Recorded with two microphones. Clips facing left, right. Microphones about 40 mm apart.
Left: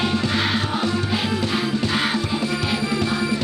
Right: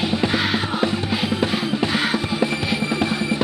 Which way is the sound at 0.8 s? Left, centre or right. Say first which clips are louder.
Right 1 dB; right.